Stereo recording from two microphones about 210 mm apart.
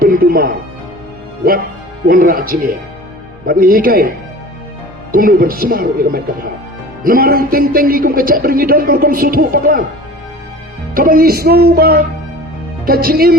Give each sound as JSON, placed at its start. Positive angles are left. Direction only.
{"t": 0.0, "sound": "music", "side_deg": -45}
{"t": 2.0, "sound": "speech", "side_deg": -40}
{"t": 5.1, "sound": "speech", "side_deg": -45}
{"t": 10.9, "sound": "speech", "side_deg": -45}